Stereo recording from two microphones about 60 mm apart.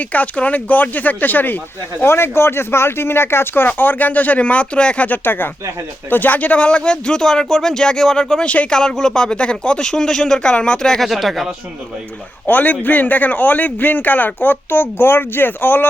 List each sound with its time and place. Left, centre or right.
0.0 s speech: left; by 11.4 s centre
12.5 s speech: left